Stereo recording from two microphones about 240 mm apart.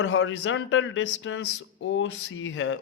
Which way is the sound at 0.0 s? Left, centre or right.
Left.